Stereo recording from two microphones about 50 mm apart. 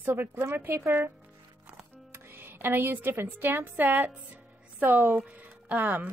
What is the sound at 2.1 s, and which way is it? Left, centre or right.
A woman's voice, right.